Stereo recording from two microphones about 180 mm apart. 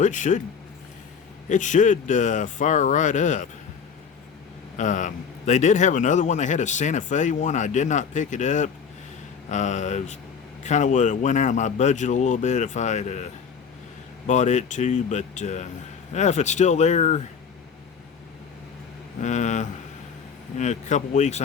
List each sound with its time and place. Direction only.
0.0 s a man's voice: 45° left (ahead or behind)
1.5 s a man's voice: 45° left (ahead or behind)
4.8 s a man's voice: 45° left (ahead or behind)
19.2 s speech: 40° left (ahead or behind)